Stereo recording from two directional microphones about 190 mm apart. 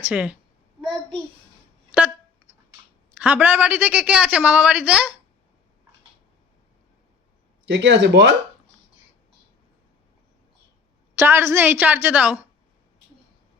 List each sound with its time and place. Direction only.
0.0 s a woman's voice: 5° right (ahead or behind)
3.2 s a woman's voice: 10° right (ahead or behind)
7.6 s speech: 70° right (ahead or behind)
11.2 s a woman's voice: 15° right (ahead or behind)